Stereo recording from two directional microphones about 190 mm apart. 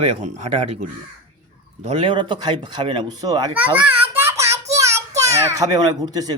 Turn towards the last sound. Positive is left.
turn(degrees=-20)  # may be behind; listen again after turning